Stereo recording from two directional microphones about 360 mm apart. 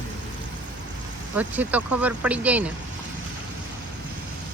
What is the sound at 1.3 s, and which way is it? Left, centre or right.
Speech, centre.